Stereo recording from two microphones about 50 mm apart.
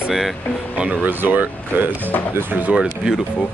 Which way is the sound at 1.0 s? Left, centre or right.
Right.